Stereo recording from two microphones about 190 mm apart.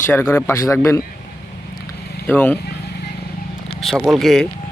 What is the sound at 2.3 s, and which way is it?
Speech, 10° left (ahead or behind).